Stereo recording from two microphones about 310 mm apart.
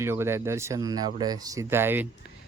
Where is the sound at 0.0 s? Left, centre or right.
Centre.